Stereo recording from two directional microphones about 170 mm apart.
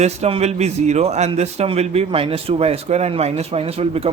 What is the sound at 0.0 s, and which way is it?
Speech, 40° right (ahead or behind).